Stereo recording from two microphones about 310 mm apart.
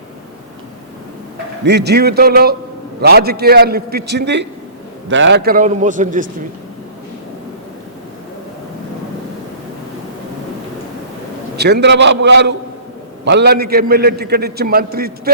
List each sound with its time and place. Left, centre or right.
1.6 s a man's voice: right
11.5 s a man's voice: right